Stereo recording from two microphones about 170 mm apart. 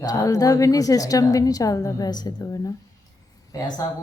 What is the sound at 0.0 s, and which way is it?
A woman's voice, 20° left (ahead or behind).